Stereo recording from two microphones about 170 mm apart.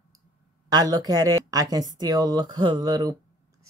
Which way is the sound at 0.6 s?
20° right (ahead or behind).